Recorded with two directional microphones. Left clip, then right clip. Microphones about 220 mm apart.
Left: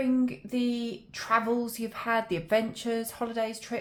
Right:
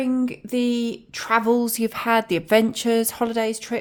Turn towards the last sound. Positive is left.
turn(degrees=-50)  # may be behind; listen again after turning